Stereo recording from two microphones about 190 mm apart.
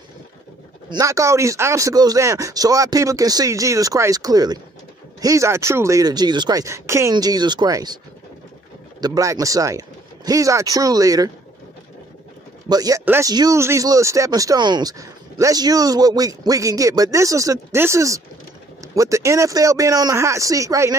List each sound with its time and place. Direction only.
0.8 s speech: 20° right (ahead or behind)
9.0 s speech: 20° right (ahead or behind)
12.6 s a man's voice: 20° right (ahead or behind)